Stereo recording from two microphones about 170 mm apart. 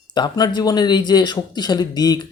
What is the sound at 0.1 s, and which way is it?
Speech, 25° left (ahead or behind).